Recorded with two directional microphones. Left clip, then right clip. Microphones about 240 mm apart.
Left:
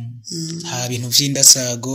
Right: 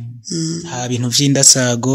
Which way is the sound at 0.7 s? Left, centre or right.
Right.